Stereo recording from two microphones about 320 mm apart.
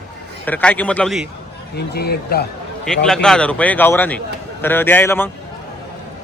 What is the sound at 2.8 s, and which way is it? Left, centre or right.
A man's voice, centre.